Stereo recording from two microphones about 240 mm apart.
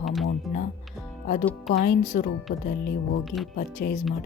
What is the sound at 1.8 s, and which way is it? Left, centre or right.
Speech, left.